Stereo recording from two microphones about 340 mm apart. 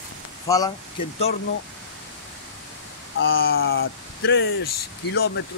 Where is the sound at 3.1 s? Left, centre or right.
Left.